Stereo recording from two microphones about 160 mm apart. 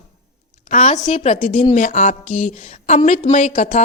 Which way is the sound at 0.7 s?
50° left (ahead or behind).